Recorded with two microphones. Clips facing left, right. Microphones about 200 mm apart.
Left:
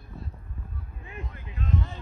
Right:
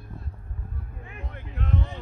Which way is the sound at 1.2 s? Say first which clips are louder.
Right 2 dB; 65° right (ahead or behind).